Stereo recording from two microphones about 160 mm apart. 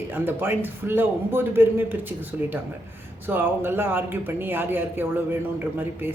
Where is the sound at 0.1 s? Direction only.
10° right (ahead or behind).